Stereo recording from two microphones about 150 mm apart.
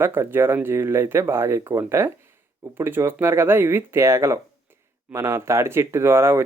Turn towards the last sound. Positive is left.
turn(degrees=-15)  # may be behind; listen again after turning